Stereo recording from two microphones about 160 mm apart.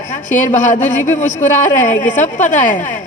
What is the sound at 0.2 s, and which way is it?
A woman's voice, 50° left (ahead or behind).